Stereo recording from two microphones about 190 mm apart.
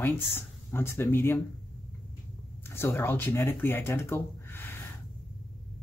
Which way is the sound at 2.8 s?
15° left (ahead or behind).